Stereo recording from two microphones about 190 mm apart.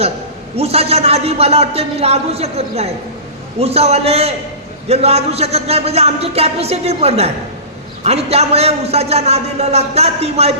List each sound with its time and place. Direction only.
0.5 s a man's voice: 30° right (ahead or behind)